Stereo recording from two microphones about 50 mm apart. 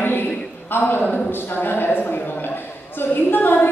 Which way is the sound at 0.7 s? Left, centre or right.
Left.